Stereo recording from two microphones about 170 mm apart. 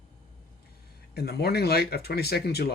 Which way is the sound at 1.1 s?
70° left (ahead or behind).